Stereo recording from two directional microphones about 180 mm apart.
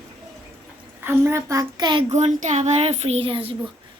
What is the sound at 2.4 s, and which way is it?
Speech, 40° right (ahead or behind).